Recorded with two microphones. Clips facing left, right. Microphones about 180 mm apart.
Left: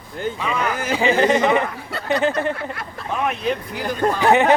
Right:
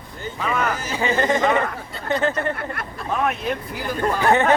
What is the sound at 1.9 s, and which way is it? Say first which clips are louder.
Speech: left 4 dB; 75° left (ahead or behind).